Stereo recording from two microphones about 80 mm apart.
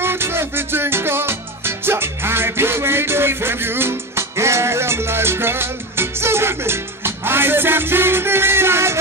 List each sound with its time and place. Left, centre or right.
0.0 s music: right